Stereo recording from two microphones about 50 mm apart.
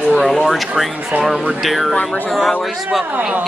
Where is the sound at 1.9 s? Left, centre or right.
Left.